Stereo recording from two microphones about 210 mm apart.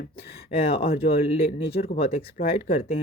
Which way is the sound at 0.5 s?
30° left (ahead or behind).